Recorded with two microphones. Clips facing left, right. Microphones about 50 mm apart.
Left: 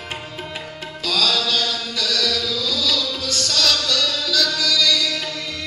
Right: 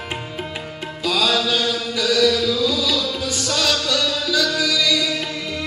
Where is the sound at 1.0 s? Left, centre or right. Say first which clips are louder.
Right 2 dB; centre.